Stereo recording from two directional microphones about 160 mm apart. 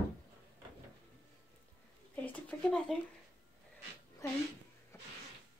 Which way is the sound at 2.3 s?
5° left (ahead or behind).